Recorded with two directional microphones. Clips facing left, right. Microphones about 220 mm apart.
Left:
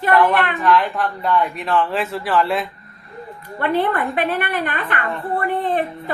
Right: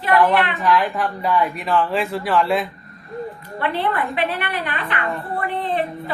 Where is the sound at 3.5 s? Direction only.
50° left (ahead or behind).